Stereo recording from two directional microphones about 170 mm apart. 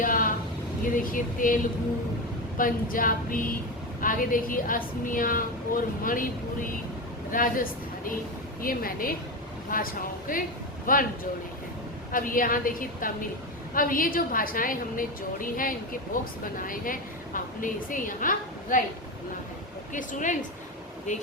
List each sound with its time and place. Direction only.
0.0 s a sound: 55° left (ahead or behind)
0.9 s a woman's voice: 55° left (ahead or behind)
2.6 s a woman's voice: 55° left (ahead or behind)
12.1 s a woman's voice: 55° left (ahead or behind)
19.9 s a woman's voice: 50° left (ahead or behind)